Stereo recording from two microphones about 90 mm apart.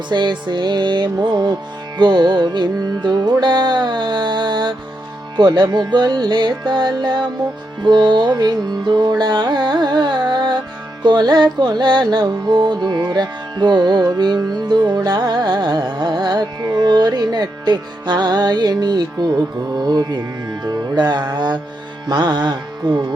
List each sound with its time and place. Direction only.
0.1 s music: 55° right (ahead or behind)